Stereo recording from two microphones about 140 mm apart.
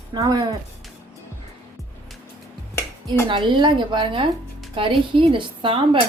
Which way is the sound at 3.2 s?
35° right (ahead or behind).